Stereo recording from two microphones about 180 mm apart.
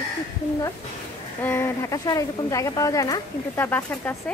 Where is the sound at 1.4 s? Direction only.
15° left (ahead or behind).